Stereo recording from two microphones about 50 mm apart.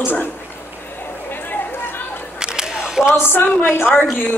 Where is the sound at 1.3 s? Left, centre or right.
Left.